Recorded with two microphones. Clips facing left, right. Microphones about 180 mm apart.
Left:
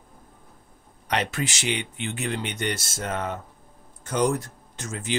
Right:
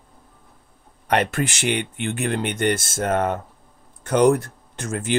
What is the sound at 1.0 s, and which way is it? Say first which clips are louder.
Speech: right 6 dB; 55° right (ahead or behind).